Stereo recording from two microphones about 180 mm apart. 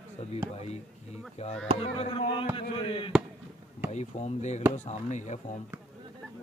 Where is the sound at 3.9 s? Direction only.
40° left (ahead or behind).